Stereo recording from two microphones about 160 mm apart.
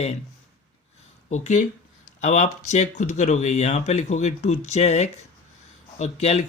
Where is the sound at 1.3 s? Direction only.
50° left (ahead or behind).